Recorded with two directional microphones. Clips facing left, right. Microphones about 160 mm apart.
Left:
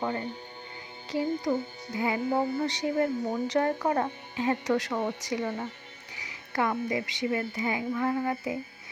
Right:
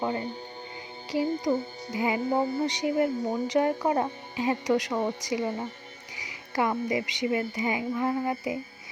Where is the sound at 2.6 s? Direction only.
15° right (ahead or behind).